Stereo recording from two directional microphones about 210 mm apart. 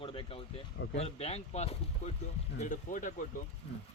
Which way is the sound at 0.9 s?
30° left (ahead or behind).